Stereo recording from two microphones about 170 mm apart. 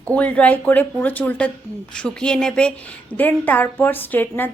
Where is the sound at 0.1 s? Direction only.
10° left (ahead or behind).